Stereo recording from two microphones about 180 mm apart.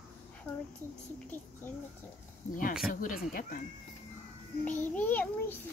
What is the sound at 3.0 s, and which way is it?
Speech, 50° left (ahead or behind).